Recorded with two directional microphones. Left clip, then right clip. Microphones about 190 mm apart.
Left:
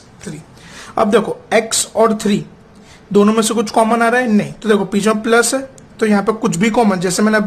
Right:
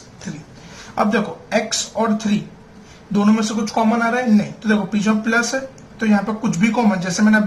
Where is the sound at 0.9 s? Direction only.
50° left (ahead or behind).